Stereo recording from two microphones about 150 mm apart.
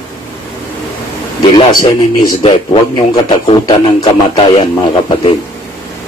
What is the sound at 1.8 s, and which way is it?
Speech, 30° left (ahead or behind).